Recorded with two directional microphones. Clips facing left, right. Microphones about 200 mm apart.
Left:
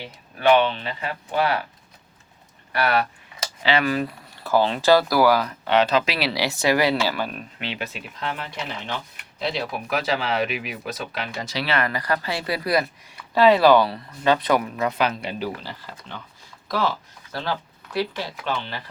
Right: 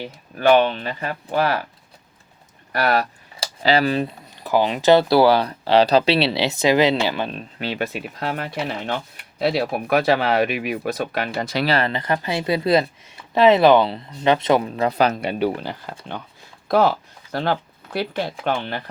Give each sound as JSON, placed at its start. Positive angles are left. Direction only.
{"t": 0.0, "sound": "speech", "side_deg": -45}
{"t": 2.7, "sound": "speech", "side_deg": -40}
{"t": 7.7, "sound": "speech", "side_deg": -40}
{"t": 8.3, "sound": "speech", "side_deg": -55}
{"t": 11.7, "sound": "speech", "side_deg": -25}